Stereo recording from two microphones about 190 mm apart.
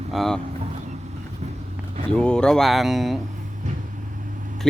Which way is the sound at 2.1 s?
5° left (ahead or behind).